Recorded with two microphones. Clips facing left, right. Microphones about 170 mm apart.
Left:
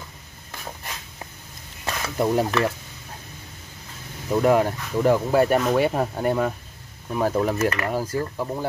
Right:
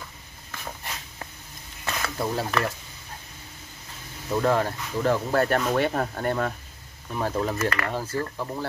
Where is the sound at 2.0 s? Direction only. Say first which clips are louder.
Left 7 dB; 15° left (ahead or behind).